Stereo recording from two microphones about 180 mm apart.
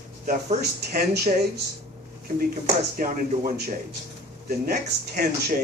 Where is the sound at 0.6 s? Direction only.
60° right (ahead or behind).